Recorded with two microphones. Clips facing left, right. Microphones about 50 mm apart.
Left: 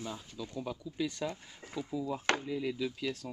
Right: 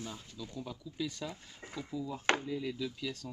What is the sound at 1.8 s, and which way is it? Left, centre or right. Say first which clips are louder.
Speech: left 4 dB; centre.